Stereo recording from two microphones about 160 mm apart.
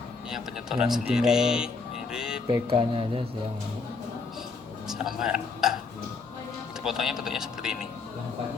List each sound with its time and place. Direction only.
0.3 s speech: 5° right (ahead or behind)
2.5 s speech: 35° right (ahead or behind)
4.9 s speech: 5° right (ahead or behind)
6.8 s speech: 5° right (ahead or behind)